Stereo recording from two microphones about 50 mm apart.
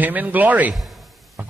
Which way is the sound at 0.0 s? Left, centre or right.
Right.